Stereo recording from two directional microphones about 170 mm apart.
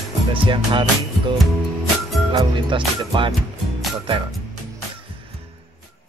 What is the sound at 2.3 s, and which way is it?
Speech, 30° right (ahead or behind).